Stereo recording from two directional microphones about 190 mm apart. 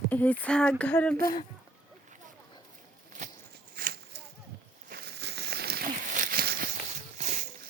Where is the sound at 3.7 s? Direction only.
55° right (ahead or behind).